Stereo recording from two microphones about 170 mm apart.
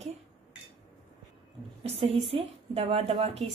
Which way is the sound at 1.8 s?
35° right (ahead or behind).